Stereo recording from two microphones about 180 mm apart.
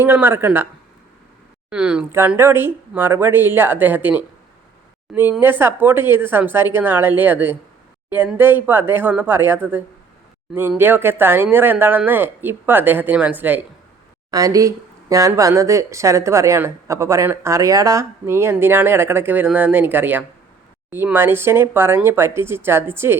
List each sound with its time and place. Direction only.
0.0 s speech: 10° right (ahead or behind)
1.7 s a woman's voice: 5° right (ahead or behind)